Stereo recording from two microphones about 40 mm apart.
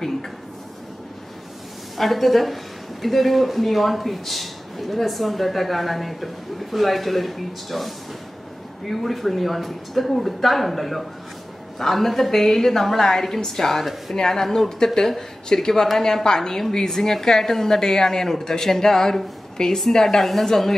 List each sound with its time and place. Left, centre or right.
2.0 s a woman's voice: centre
20.2 s speech: centre